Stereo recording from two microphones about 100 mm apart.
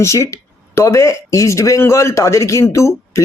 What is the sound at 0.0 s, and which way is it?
Speech, 30° left (ahead or behind).